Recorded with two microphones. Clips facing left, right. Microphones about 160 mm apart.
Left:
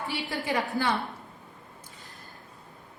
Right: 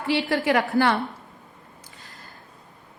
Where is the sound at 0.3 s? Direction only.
80° right.